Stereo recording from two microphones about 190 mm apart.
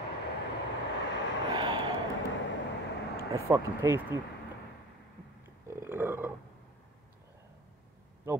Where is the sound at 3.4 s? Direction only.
15° right (ahead or behind).